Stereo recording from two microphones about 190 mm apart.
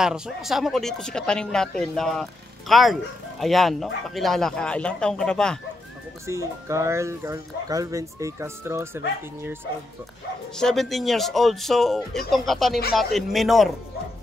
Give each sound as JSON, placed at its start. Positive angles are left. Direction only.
{"t": 0.0, "sound": "speech", "side_deg": 0}
{"t": 6.2, "sound": "speech", "side_deg": -15}
{"t": 10.6, "sound": "speech", "side_deg": 0}